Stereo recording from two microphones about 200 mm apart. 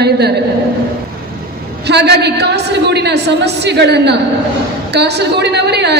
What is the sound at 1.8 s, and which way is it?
A woman's voice, 55° right (ahead or behind).